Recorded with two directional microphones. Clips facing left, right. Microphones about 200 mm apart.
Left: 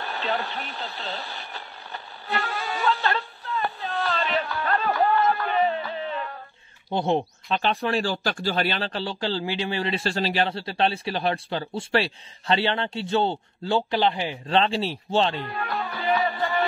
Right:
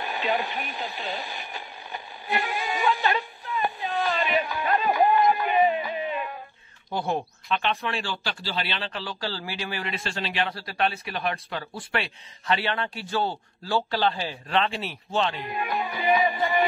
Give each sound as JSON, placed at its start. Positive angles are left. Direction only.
{"t": 0.0, "sound": "radio", "side_deg": -15}
{"t": 6.9, "sound": "speech", "side_deg": 25}
{"t": 10.5, "sound": "speech", "side_deg": 25}
{"t": 14.5, "sound": "speech", "side_deg": 30}
{"t": 15.4, "sound": "music", "side_deg": -15}